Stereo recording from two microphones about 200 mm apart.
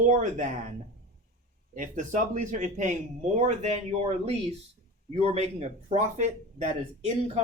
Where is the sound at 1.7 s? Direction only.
40° right (ahead or behind).